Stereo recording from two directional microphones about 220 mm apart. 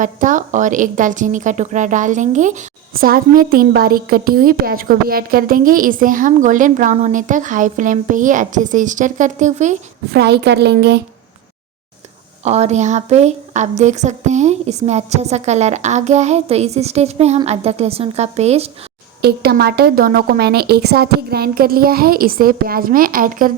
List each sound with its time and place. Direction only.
0.0 s a woman's voice: 35° right (ahead or behind)
10.1 s a woman's voice: 50° right (ahead or behind)
12.5 s a woman's voice: 30° right (ahead or behind)
19.2 s a woman's voice: 45° right (ahead or behind)